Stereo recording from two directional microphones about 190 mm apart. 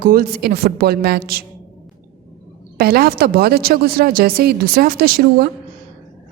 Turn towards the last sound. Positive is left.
turn(degrees=-55)  # may be behind; listen again after turning